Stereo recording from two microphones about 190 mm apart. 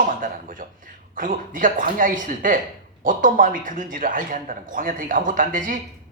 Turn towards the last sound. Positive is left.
turn(degrees=-45)  # may be behind; listen again after turning